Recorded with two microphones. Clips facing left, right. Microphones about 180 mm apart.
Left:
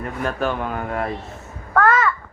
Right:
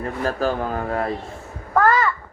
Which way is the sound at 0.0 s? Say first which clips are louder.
Right 1 dB; 35° right (ahead or behind).